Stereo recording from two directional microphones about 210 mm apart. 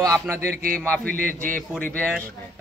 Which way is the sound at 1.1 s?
40° right (ahead or behind).